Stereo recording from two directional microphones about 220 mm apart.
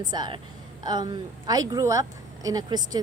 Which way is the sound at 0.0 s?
20° right (ahead or behind).